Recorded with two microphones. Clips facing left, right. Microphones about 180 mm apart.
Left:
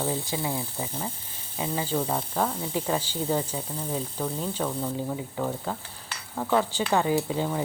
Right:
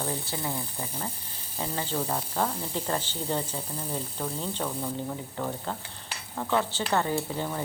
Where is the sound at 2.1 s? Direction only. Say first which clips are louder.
Left 2 dB; 5° right (ahead or behind).